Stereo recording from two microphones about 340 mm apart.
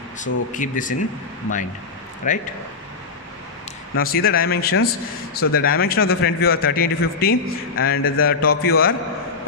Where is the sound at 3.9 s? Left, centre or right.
Left.